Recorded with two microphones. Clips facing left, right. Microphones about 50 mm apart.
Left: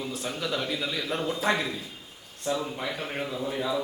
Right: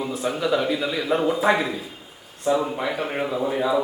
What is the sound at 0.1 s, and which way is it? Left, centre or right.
A man's voice, centre.